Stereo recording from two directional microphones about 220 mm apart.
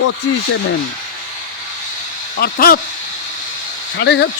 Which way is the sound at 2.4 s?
45° left (ahead or behind).